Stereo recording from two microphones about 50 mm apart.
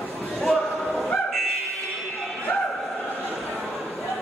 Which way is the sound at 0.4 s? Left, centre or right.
Centre.